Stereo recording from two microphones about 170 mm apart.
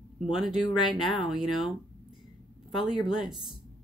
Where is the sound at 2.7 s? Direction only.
25° left (ahead or behind).